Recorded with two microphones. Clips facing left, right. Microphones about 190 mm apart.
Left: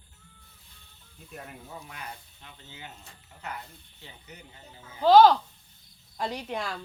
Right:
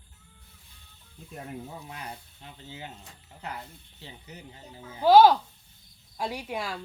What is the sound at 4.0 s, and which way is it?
Speech, 30° right (ahead or behind).